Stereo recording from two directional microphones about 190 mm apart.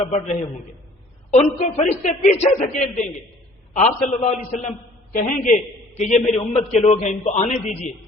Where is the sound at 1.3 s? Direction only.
35° left (ahead or behind).